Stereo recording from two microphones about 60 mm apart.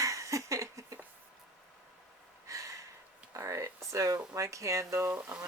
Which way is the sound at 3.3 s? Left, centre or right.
Right.